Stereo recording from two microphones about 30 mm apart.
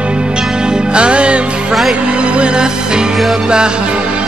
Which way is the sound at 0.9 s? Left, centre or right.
Right.